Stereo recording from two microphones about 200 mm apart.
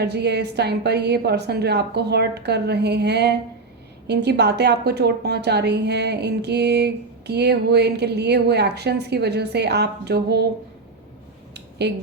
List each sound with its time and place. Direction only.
0.0 s a woman's voice: 55° right (ahead or behind)
11.8 s a woman's voice: 60° right (ahead or behind)